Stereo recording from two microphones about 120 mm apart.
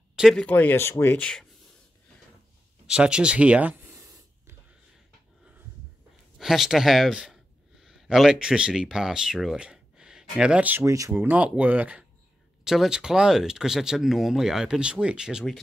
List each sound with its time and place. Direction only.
0.1 s a sound: 5° right (ahead or behind)
0.4 s speech: 15° left (ahead or behind)
2.9 s speech: 10° right (ahead or behind)
3.9 s a sound: 25° right (ahead or behind)
6.3 s speech: centre (ahead or behind)
10.8 s speech: 25° right (ahead or behind)
11.2 s speech: 10° right (ahead or behind)